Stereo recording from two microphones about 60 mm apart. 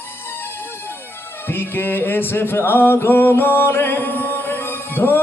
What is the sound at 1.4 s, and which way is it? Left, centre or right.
Music, left.